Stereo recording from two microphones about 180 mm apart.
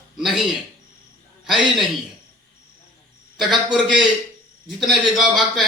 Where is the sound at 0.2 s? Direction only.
Centre (ahead or behind).